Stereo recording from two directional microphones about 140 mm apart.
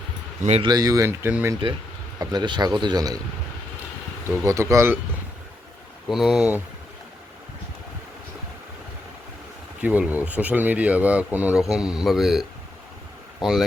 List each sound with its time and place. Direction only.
0.6 s speech: 30° right (ahead or behind)
1.3 s speech: 10° right (ahead or behind)
2.1 s speech: 30° right (ahead or behind)
4.4 s speech: 20° right (ahead or behind)
6.1 s speech: centre (ahead or behind)
9.8 s speech: 10° right (ahead or behind)